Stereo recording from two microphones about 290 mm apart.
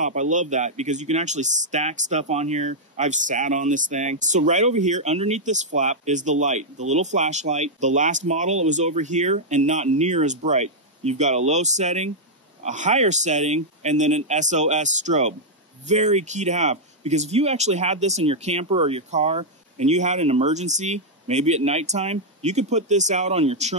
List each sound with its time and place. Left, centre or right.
0.0 s speech: right